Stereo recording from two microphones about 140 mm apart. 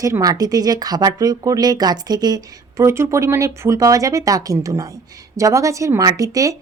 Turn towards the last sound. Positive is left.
turn(degrees=-25)  # may be behind; listen again after turning